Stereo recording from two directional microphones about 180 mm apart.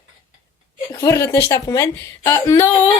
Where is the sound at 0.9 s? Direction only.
15° left (ahead or behind).